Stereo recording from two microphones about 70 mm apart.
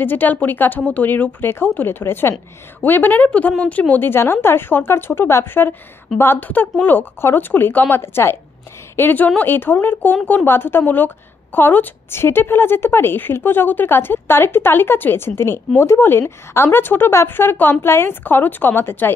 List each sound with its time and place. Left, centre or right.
0.0 s speech: left
3.9 s a woman's voice: left